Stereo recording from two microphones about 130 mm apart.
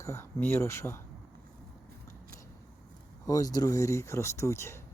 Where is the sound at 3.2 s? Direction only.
30° left (ahead or behind).